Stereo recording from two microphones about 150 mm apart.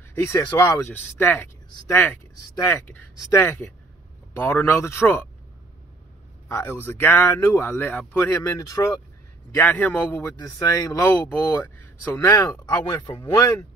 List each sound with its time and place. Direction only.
0.1 s speech: 20° left (ahead or behind)
0.8 s speech: 15° left (ahead or behind)
2.6 s speech: 15° left (ahead or behind)
6.5 s speech: 15° left (ahead or behind)
12.2 s speech: 25° left (ahead or behind)